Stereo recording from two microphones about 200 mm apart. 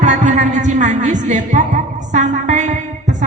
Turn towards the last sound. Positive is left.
turn(degrees=-35)  # may be behind; listen again after turning